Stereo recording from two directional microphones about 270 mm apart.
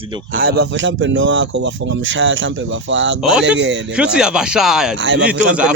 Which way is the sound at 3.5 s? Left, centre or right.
Right.